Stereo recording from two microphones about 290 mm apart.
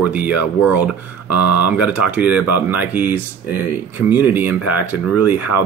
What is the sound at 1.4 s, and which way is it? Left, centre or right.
Speech, left.